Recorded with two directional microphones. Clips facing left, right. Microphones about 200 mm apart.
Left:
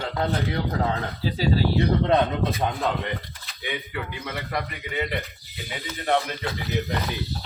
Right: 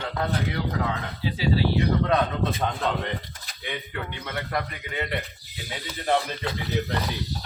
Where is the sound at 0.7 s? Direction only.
35° left (ahead or behind).